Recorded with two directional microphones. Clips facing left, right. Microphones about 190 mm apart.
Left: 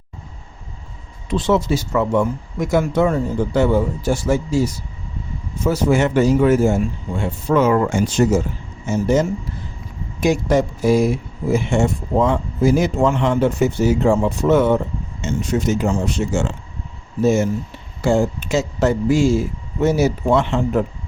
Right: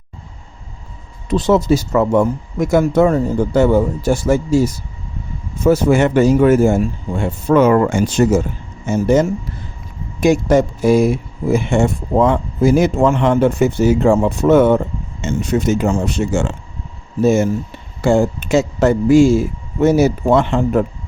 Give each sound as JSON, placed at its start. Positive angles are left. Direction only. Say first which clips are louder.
{"t": 1.3, "sound": "speech", "louder": "right 4 dB", "side_deg": -40}
{"t": 18.0, "sound": "speech", "louder": "right 3 dB", "side_deg": -55}